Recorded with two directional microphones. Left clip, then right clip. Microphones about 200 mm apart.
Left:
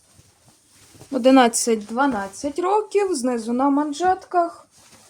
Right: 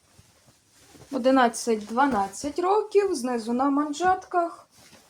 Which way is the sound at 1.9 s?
35° left (ahead or behind).